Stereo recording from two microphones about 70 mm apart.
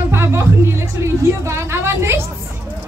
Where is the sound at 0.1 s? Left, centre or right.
Right.